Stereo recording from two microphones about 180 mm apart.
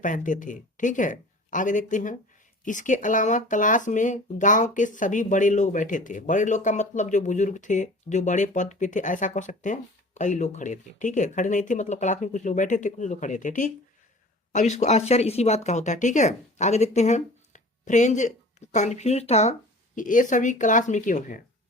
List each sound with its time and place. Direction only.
0.0 s speech: 45° left (ahead or behind)
20.0 s speech: 45° left (ahead or behind)